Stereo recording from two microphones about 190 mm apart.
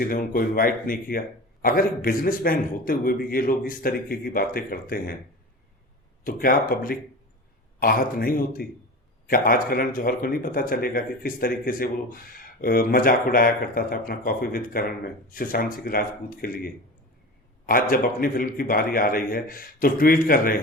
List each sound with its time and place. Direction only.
0.0 s speech: 50° left (ahead or behind)
6.2 s speech: 50° left (ahead or behind)